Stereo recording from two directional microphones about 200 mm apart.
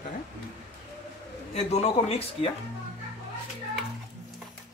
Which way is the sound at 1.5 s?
30° left (ahead or behind).